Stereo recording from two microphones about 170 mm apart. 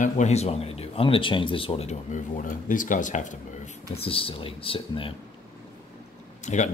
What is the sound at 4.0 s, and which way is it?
Speech, 35° left (ahead or behind).